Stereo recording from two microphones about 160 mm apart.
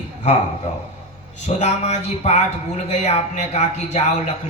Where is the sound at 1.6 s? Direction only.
45° left (ahead or behind).